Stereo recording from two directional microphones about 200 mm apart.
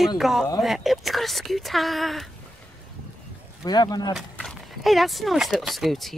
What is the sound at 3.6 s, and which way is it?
Speech, 20° left (ahead or behind).